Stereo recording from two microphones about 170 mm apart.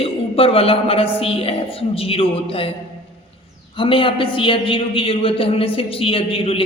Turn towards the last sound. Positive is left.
turn(degrees=35)  # may be behind; listen again after turning